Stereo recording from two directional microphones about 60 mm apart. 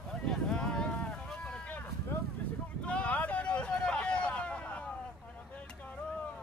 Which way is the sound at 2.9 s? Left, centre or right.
Left.